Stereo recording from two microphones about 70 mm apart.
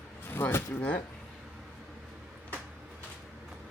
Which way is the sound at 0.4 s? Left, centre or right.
Left.